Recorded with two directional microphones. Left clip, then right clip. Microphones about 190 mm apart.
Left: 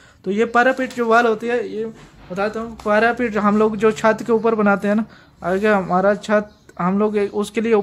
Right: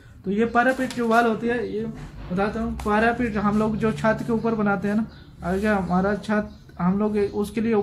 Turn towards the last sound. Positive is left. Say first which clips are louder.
# left 6 dB
turn(degrees=50)  # may be behind; listen again after turning